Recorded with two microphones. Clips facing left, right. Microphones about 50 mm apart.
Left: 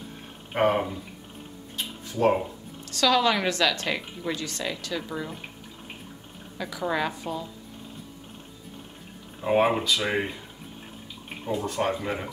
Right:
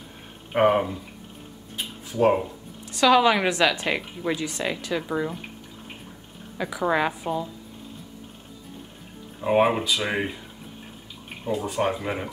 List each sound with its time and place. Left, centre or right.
0.5 s a woman's voice: centre
1.8 s a sound: centre
2.8 s a woman's voice: centre
6.6 s a woman's voice: centre
9.4 s speech: centre
11.4 s a woman's voice: centre